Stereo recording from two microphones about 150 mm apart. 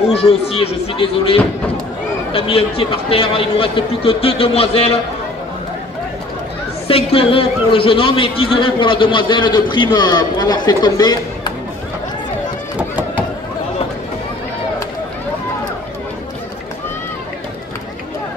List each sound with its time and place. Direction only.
0.1 s a man's voice: 40° left (ahead or behind)
6.9 s a man's voice: 40° left (ahead or behind)